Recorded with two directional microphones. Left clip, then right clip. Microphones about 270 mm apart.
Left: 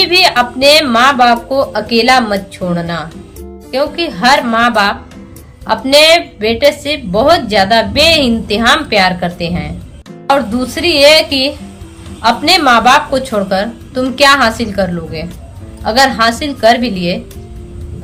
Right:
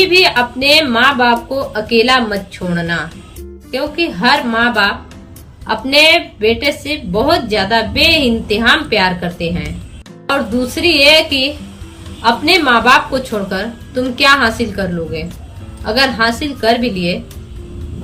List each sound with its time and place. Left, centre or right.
0.0 s a woman's voice: centre